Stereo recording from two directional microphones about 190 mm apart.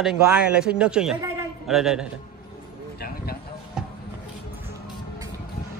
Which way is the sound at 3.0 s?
55° left (ahead or behind).